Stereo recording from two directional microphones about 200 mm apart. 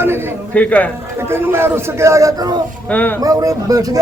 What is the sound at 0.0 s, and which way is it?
Speech, 10° right (ahead or behind).